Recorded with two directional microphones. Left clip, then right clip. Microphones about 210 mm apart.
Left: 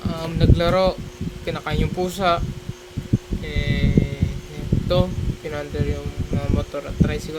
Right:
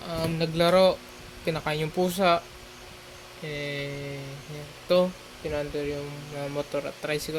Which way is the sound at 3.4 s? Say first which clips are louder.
Even; 5° left (ahead or behind).